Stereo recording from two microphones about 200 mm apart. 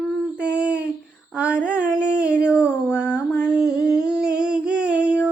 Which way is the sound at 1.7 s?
5° right (ahead or behind).